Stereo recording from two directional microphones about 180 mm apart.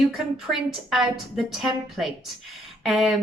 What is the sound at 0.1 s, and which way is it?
A woman's voice, centre (ahead or behind).